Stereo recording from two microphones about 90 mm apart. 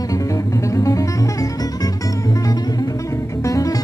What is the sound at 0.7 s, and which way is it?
Music, 35° left (ahead or behind).